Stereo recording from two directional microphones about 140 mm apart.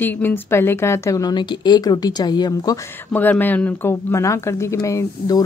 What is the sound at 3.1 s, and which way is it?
Speech, 10° left (ahead or behind).